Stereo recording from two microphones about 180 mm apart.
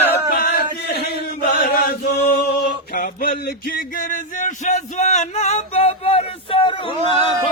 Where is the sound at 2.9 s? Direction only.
55° left (ahead or behind).